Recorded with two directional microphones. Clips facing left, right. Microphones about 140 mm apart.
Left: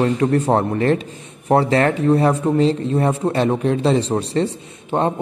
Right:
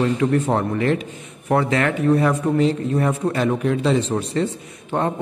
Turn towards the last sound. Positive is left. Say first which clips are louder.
# left 3 dB
turn(degrees=20)  # may be behind; listen again after turning